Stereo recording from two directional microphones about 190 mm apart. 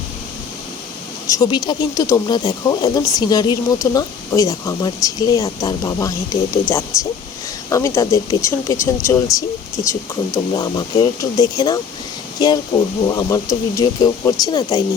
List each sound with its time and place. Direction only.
1.3 s speech: 20° left (ahead or behind)
13.1 s speech: 20° left (ahead or behind)